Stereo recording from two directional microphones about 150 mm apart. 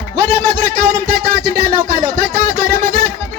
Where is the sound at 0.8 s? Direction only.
65° right (ahead or behind).